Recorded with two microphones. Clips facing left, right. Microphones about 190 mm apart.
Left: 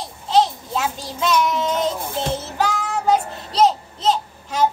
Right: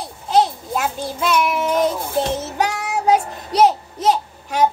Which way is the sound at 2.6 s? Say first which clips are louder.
Even; 15° right (ahead or behind).